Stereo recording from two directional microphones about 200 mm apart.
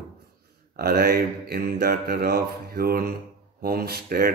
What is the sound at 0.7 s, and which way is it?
Speech, 50° right (ahead or behind).